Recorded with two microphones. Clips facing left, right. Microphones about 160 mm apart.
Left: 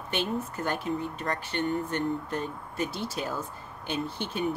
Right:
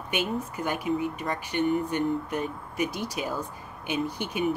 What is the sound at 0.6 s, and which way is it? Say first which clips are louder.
Speech: right 5 dB; 10° right (ahead or behind).